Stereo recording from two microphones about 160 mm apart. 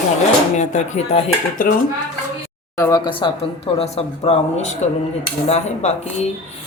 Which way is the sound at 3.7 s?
40° left (ahead or behind).